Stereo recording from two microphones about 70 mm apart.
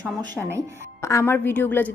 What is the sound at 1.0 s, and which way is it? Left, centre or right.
Speech, left.